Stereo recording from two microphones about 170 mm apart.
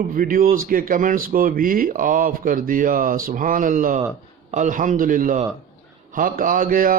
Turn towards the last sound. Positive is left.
turn(degrees=-55)  # may be behind; listen again after turning